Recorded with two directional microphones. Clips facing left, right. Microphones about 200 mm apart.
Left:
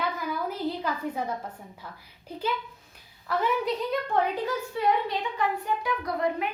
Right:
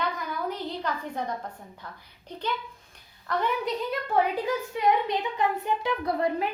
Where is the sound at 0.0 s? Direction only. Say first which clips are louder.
Even; 5° left (ahead or behind).